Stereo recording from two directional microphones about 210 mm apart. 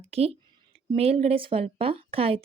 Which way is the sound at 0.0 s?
30° right (ahead or behind).